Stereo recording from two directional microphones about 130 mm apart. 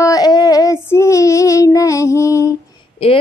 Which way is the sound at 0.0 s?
30° left (ahead or behind).